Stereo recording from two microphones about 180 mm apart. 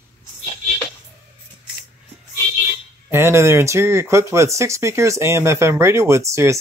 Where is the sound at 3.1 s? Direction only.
15° right (ahead or behind).